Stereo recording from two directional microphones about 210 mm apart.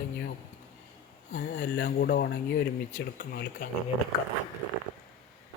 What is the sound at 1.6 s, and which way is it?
Speech, 55° left (ahead or behind).